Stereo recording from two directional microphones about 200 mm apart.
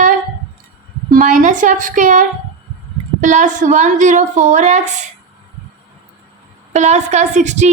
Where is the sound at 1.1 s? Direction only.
40° right (ahead or behind).